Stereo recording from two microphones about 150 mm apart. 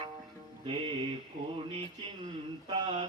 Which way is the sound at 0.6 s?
35° right (ahead or behind).